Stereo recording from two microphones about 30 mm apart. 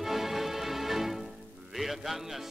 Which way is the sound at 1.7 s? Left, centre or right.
Centre.